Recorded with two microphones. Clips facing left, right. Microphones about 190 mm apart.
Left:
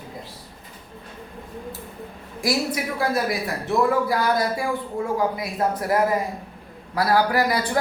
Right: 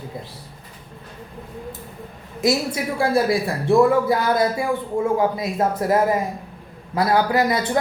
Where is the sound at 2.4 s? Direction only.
20° right (ahead or behind).